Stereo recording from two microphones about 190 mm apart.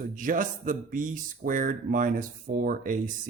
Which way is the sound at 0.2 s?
45° right (ahead or behind).